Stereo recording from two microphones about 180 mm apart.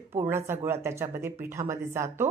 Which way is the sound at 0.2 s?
15° right (ahead or behind).